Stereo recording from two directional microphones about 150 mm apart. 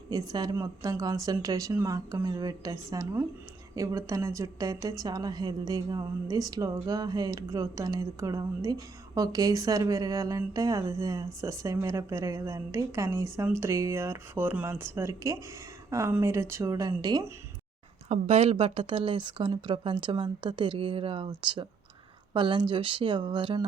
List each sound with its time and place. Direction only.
0.1 s a woman's voice: 25° right (ahead or behind)
18.1 s speech: 45° right (ahead or behind)